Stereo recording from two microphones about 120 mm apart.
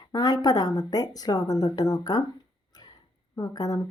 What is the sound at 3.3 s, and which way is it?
Speech, 30° left (ahead or behind).